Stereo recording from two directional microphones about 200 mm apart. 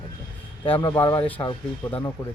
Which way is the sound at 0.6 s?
30° left (ahead or behind).